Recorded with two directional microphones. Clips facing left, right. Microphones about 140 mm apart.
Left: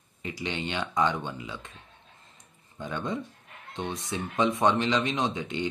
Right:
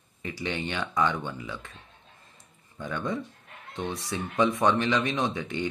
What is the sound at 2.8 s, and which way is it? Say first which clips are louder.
Speech: right 1 dB; 20° left (ahead or behind).